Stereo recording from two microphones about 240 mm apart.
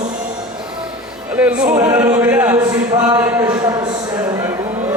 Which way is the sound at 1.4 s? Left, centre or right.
Centre.